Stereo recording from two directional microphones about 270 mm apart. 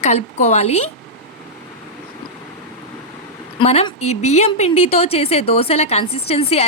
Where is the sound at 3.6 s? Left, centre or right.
Left.